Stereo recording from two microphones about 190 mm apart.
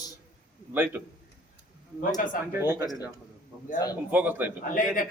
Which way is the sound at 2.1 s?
45° left (ahead or behind).